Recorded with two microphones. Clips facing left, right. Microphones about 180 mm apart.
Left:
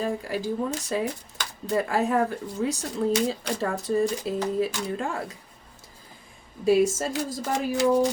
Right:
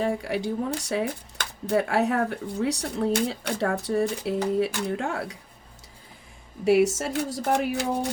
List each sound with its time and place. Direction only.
0.0 s speech: 75° right (ahead or behind)
3.1 s speech: 60° right (ahead or behind); by 5.4 s 80° right
6.7 s speech: 75° right (ahead or behind)